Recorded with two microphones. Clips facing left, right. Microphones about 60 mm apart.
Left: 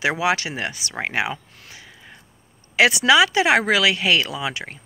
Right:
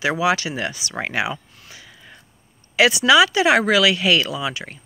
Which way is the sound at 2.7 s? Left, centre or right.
Left.